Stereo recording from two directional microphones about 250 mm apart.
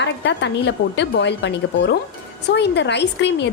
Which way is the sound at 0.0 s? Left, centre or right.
Left.